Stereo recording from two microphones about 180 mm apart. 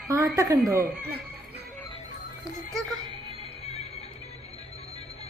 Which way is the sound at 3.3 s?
30° left (ahead or behind).